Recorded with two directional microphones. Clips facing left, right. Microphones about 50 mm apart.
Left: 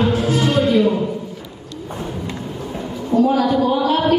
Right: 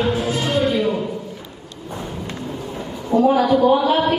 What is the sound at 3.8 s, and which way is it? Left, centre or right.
Chant, centre.